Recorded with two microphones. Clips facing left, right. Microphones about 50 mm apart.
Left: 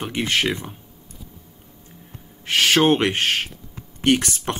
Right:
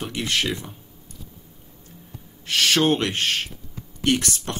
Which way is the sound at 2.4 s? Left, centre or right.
Left.